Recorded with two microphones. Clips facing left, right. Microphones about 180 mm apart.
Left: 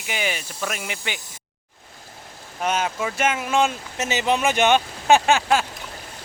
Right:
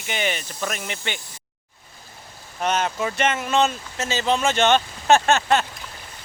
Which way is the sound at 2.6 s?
5° left (ahead or behind).